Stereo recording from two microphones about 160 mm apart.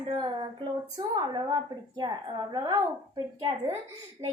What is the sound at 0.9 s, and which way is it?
A woman's voice, 25° right (ahead or behind).